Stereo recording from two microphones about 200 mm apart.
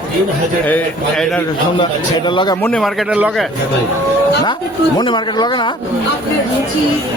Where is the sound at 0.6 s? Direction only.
5° left (ahead or behind).